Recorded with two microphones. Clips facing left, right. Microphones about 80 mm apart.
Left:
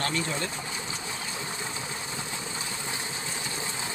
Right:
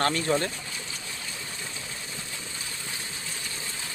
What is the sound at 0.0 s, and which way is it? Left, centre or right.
Speech, right.